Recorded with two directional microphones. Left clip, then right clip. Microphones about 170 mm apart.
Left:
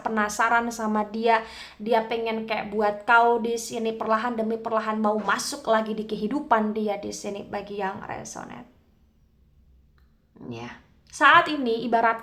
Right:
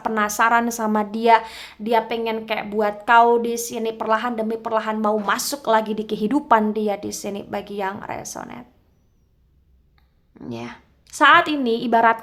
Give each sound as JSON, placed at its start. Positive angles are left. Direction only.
{"t": 0.0, "sound": "a woman's voice", "side_deg": -30}
{"t": 10.4, "sound": "a woman's voice", "side_deg": -35}